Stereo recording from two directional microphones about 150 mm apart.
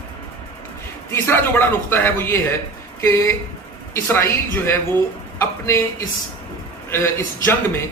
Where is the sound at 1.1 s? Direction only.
15° left (ahead or behind).